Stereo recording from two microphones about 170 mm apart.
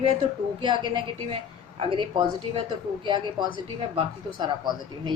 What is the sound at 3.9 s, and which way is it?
A woman's voice, 25° right (ahead or behind).